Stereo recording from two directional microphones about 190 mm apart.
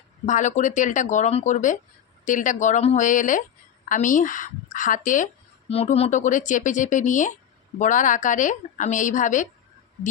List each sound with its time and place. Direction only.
0.3 s a woman's voice: 40° left (ahead or behind)